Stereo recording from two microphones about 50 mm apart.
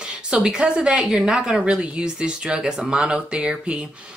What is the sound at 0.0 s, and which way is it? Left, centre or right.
A woman's voice, centre.